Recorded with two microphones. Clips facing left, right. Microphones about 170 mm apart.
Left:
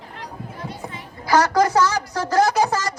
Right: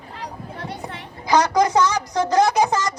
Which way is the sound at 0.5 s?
65° right (ahead or behind).